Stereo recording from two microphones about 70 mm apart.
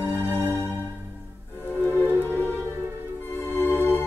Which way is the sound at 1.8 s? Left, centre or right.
Left.